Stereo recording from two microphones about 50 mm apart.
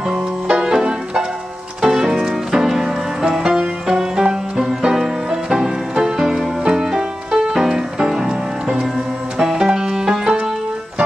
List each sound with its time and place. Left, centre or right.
0.1 s music: centre